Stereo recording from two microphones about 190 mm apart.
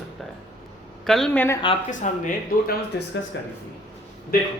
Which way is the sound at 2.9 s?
60° left (ahead or behind).